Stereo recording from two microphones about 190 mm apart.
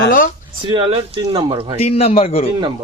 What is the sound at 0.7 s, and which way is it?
Speech, 25° right (ahead or behind).